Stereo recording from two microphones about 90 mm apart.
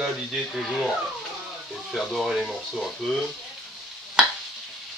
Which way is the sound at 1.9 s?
Centre (ahead or behind).